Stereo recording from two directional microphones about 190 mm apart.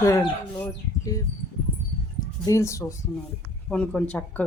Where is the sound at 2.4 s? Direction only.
15° left (ahead or behind).